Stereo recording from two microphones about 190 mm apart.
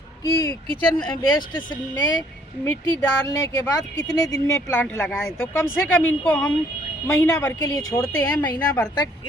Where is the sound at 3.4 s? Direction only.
15° left (ahead or behind).